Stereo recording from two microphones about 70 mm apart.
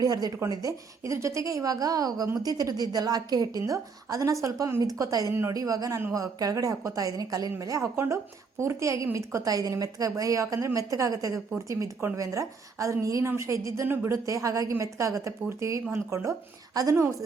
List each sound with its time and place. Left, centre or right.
0.0 s a woman's voice: right
7.9 s a woman's voice: right
13.8 s speech: right
14.1 s a woman's voice: right